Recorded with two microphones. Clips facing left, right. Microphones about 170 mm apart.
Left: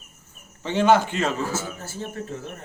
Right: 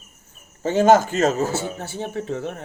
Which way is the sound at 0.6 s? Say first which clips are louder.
Right 3 dB; 45° right (ahead or behind).